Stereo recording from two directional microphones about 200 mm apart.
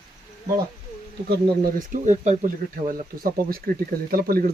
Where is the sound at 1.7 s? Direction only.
40° right (ahead or behind).